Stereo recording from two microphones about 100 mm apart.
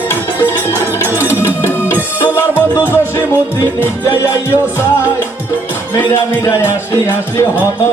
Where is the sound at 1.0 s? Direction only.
25° left (ahead or behind).